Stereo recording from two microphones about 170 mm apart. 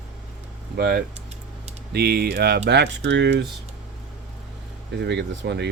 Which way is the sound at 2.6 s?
85° right.